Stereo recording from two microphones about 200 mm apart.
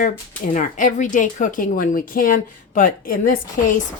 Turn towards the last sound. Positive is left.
turn(degrees=45)  # may be behind; listen again after turning